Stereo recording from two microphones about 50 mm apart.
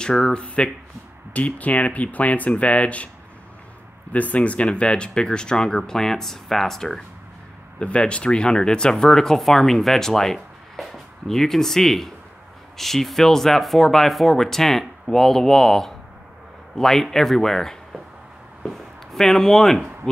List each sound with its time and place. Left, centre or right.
0.0 s speech: centre
4.1 s speech: left; by 7.0 s centre
7.8 s speech: left; by 19.9 s centre